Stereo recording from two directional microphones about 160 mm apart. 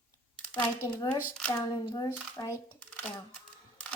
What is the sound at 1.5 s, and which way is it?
A child's voice, 25° left (ahead or behind).